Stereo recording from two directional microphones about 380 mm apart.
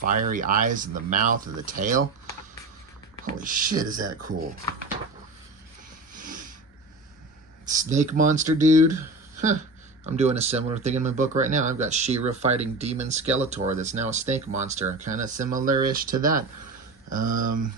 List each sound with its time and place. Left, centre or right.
0.0 s speech: right
3.2 s speech: right
6.1 s a sound: right
7.6 s speech: centre
10.1 s speech: centre